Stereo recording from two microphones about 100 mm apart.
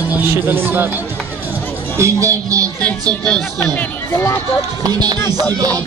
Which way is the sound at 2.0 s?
30° right (ahead or behind).